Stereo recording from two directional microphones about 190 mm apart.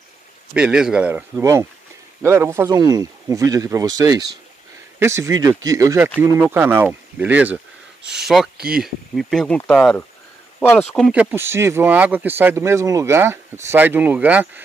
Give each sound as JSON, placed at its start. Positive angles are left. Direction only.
{"t": 0.6, "sound": "speech", "side_deg": -5}
{"t": 10.9, "sound": "speech", "side_deg": -5}